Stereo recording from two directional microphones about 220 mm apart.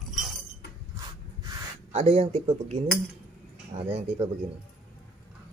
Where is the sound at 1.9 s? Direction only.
30° right (ahead or behind).